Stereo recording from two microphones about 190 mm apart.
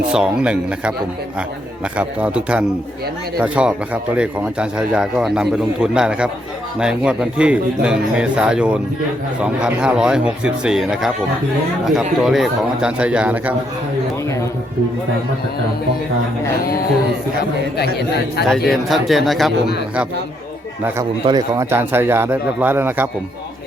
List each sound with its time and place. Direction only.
0.1 s speech: 5° right (ahead or behind)
2.0 s speech: 5° right (ahead or behind)
17.7 s speech: 60° left (ahead or behind)
18.7 s speech: centre (ahead or behind)
21.2 s speech: 20° right (ahead or behind)